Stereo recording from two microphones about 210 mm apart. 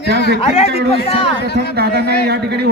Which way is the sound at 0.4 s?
30° left (ahead or behind).